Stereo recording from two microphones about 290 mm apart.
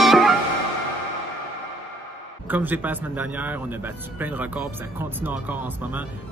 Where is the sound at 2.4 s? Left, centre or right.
Centre.